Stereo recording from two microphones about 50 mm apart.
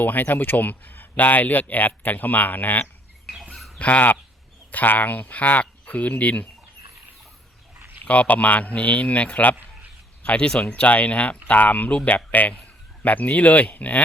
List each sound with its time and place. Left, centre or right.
0.0 s speech: left
8.0 s speech: left
10.2 s speech: left
10.7 s speech: left